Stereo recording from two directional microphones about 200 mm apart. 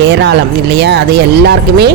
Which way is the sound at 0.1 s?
55° right (ahead or behind).